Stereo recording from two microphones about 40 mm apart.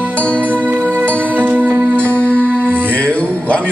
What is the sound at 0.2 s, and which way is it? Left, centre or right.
Music, left.